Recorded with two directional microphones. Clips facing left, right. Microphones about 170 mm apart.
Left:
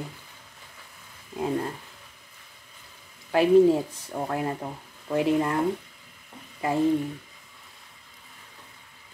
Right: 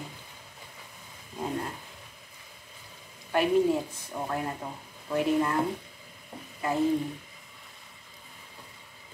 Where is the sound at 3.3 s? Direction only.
25° left (ahead or behind).